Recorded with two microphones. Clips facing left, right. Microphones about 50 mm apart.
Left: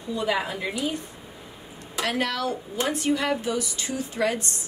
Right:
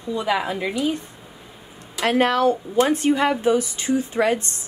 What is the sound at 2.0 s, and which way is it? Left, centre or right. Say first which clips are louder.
Speech: right 9 dB; right.